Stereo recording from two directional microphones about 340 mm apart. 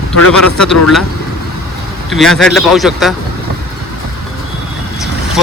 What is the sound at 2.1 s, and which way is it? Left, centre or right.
Speech, centre.